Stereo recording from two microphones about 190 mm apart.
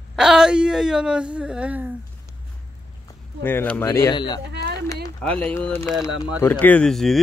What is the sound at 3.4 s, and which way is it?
Speech, 10° left (ahead or behind).